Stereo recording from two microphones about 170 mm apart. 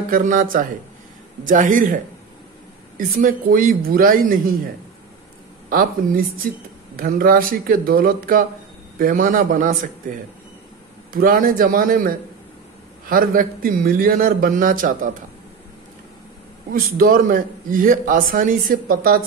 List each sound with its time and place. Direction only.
0.1 s a man's voice: 50° right (ahead or behind)
3.2 s a man's voice: 55° right (ahead or behind)
5.7 s a man's voice: 60° right (ahead or behind)
11.1 s a man's voice: 55° right (ahead or behind)
16.7 s a man's voice: 55° right (ahead or behind)